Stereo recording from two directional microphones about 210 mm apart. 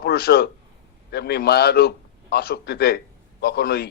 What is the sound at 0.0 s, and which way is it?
A man's voice, 50° left (ahead or behind).